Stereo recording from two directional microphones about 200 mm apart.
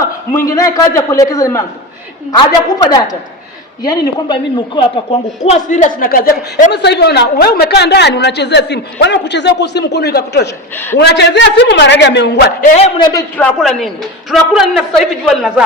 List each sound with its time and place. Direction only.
0.0 s a man's voice: 15° left (ahead or behind)
2.7 s a woman's voice: 20° left (ahead or behind); by 12.5 s 60° left (ahead or behind)
12.7 s a man's voice: 30° left (ahead or behind)
13.1 s a man's voice: 5° left (ahead or behind)